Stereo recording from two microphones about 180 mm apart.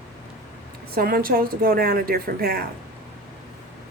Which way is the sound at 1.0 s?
55° right (ahead or behind).